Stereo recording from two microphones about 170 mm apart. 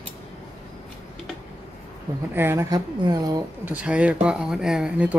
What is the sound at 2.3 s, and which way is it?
Speech, 15° right (ahead or behind).